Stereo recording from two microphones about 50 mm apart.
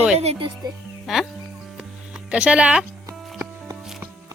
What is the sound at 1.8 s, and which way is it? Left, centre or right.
Music, centre.